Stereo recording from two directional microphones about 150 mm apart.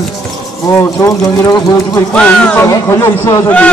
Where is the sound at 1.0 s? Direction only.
20° left (ahead or behind).